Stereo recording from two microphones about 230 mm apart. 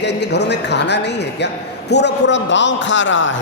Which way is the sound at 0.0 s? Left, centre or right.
Left.